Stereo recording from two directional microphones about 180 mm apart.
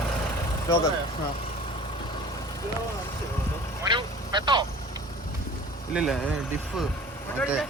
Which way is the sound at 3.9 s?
25° right (ahead or behind).